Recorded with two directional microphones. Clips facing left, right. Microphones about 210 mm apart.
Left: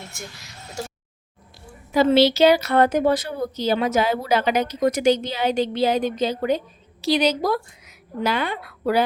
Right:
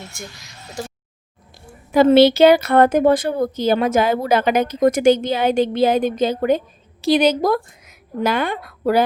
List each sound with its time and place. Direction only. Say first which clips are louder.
1.9 s a woman's voice: right 5 dB; 55° right (ahead or behind)